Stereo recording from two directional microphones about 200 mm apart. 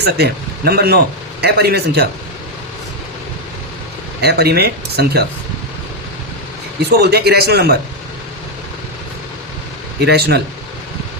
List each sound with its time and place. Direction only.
0.0 s speech: 50° right (ahead or behind)
4.2 s speech: 55° right (ahead or behind)
7.0 s speech: 55° right (ahead or behind)
10.0 s speech: 55° right (ahead or behind)